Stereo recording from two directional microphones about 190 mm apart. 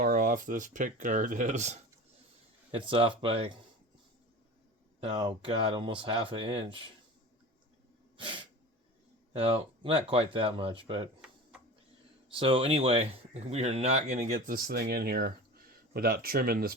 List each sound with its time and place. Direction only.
0.0 s speech: 45° right (ahead or behind)
2.7 s speech: 30° right (ahead or behind)
4.9 s speech: 30° right (ahead or behind)
8.1 s sneeze: 25° right (ahead or behind)
9.3 s speech: 30° right (ahead or behind)
12.3 s speech: 25° right (ahead or behind)
14.5 s speech: 55° right (ahead or behind)